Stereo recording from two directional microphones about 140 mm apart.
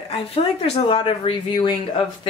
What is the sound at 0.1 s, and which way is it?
Speech, 40° left (ahead or behind).